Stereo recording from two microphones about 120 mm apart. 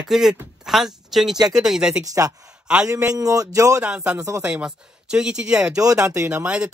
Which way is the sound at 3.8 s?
10° right (ahead or behind).